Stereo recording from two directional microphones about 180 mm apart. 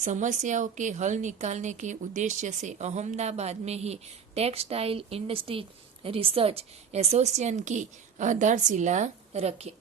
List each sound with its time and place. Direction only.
0.0 s a woman's voice: 40° right (ahead or behind)